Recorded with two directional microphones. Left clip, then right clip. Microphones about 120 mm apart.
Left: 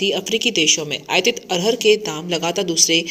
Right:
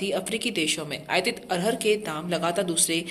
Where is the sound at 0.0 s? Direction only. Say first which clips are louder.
Left 9 dB; 15° left (ahead or behind).